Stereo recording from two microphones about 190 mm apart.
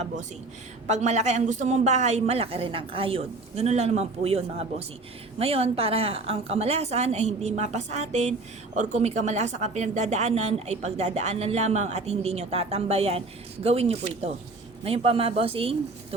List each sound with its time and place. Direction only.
0.9 s a woman's voice: 35° right (ahead or behind)